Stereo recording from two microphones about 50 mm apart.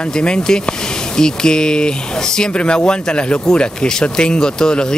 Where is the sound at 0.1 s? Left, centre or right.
Centre.